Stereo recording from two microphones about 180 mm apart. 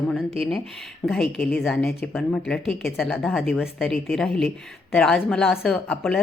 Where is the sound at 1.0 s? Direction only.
5° left (ahead or behind).